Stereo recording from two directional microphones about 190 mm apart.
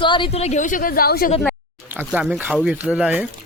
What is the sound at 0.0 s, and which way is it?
Speech, 25° left (ahead or behind).